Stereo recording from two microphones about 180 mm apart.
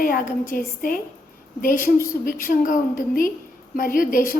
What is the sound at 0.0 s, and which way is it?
A woman's voice, 50° left (ahead or behind).